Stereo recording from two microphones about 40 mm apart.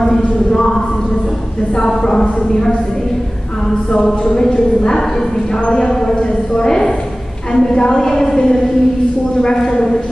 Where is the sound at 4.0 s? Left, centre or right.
Centre.